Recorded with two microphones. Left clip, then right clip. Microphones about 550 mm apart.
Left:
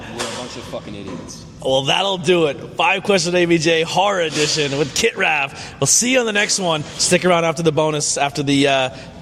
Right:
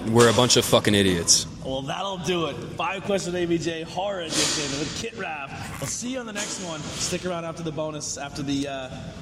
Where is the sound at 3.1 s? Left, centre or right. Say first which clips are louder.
Left 9 dB; left.